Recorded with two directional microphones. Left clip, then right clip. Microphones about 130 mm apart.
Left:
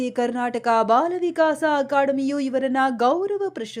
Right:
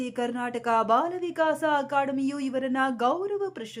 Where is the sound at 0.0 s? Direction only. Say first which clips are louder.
Left 6 dB; 40° left (ahead or behind).